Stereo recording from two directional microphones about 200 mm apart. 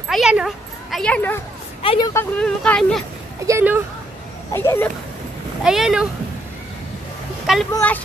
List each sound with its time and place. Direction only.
0.1 s speech: 5° right (ahead or behind)
1.8 s speech: 25° left (ahead or behind)
2.3 s speech: 5° left (ahead or behind)
3.4 s speech: 10° right (ahead or behind)
4.5 s speech: 10° left (ahead or behind)
5.6 s speech: 5° right (ahead or behind)
7.7 s speech: 10° left (ahead or behind)